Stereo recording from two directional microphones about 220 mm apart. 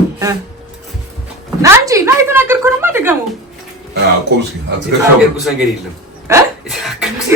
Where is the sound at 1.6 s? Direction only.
15° right (ahead or behind).